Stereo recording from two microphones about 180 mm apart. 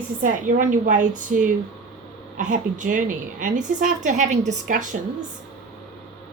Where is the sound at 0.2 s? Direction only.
45° right (ahead or behind).